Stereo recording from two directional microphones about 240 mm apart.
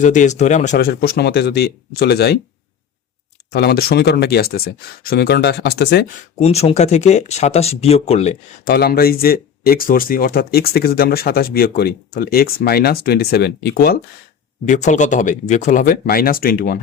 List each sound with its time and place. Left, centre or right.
0.0 s speech: left
3.5 s speech: left
6.4 s speech: left
8.7 s speech: left